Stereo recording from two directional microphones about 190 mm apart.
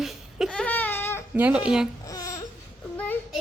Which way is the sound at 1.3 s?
10° right (ahead or behind).